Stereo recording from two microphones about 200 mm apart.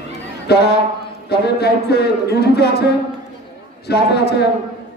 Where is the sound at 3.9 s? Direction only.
55° left (ahead or behind).